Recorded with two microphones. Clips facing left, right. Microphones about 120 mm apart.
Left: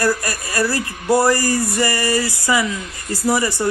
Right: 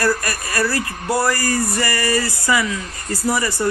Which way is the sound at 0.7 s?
25° left (ahead or behind).